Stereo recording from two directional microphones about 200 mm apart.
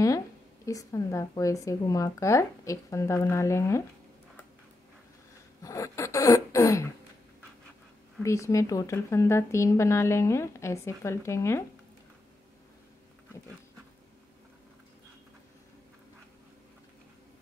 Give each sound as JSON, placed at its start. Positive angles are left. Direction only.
{"t": 0.7, "sound": "speech", "side_deg": 15}
{"t": 5.6, "sound": "speech", "side_deg": 15}
{"t": 8.2, "sound": "speech", "side_deg": 15}